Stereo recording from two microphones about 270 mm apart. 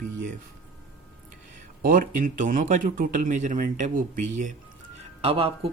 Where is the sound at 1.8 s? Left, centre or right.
Right.